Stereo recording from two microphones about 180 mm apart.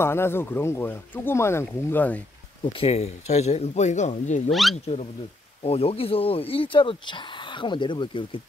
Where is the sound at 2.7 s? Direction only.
35° left (ahead or behind).